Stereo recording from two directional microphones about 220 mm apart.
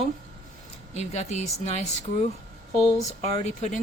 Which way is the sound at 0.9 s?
30° left (ahead or behind).